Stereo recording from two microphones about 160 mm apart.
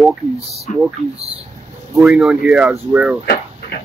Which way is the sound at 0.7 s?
50° left (ahead or behind).